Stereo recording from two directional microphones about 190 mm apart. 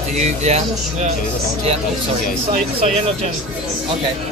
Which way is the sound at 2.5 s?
35° right (ahead or behind).